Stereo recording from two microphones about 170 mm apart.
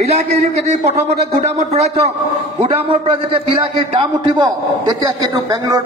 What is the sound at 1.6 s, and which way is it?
Speech, 40° right (ahead or behind).